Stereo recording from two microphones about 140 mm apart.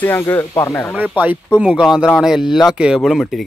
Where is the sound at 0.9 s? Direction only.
10° right (ahead or behind).